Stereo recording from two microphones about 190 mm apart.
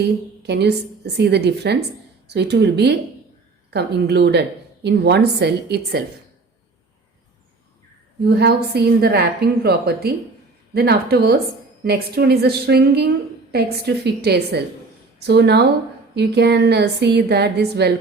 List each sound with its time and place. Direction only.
0.0 s a woman's voice: 60° right (ahead or behind)
8.2 s a woman's voice: 60° right (ahead or behind)